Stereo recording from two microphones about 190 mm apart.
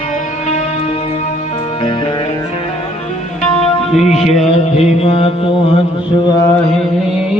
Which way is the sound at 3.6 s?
35° left (ahead or behind).